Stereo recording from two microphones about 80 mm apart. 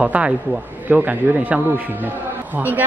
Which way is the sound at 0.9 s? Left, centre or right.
Right.